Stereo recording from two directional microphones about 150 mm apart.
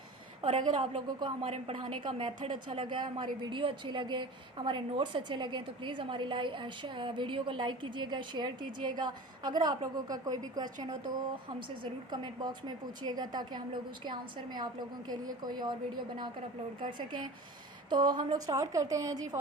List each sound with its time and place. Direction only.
0.6 s a woman's voice: 30° right (ahead or behind)
16.8 s a woman's voice: 30° right (ahead or behind)